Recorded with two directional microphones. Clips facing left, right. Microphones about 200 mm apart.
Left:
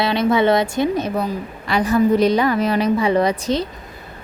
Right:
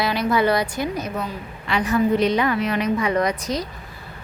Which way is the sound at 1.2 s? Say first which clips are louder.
Left 6 dB; 40° left (ahead or behind).